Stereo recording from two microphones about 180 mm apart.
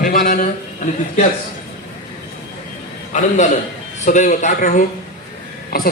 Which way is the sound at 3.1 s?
40° left (ahead or behind).